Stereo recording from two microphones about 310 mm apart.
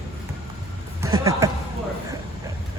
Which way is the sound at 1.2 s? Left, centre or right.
Centre.